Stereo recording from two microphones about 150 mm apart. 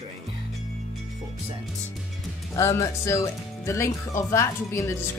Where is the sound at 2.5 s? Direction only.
20° left (ahead or behind).